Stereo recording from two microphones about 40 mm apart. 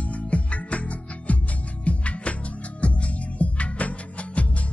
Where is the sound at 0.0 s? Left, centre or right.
Left.